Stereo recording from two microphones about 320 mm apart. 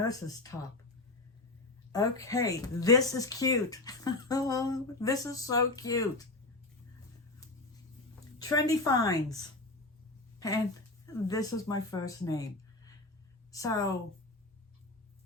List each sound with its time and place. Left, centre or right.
0.1 s speech: centre
1.9 s speech: centre
8.4 s speech: centre
11.0 s speech: centre